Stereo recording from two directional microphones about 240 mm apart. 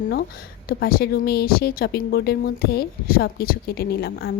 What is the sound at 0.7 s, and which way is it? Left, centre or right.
A woman's voice, left.